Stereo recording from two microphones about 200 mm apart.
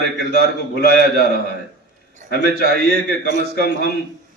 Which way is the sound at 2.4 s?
55° right (ahead or behind).